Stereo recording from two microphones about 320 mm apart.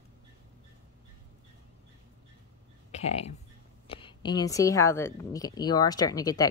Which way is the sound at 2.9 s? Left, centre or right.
Centre.